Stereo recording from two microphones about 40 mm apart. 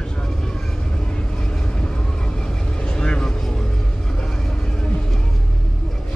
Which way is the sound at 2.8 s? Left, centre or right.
Left.